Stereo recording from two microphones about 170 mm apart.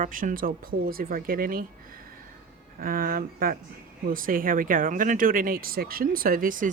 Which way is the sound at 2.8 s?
60° right (ahead or behind).